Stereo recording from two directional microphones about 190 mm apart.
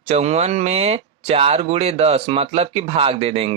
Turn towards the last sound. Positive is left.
turn(degrees=-30)  # may be behind; listen again after turning